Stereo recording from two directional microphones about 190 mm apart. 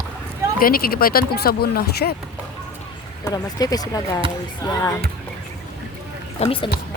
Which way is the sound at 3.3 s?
20° left (ahead or behind).